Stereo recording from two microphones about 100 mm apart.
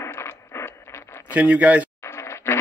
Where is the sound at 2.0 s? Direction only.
25° left (ahead or behind).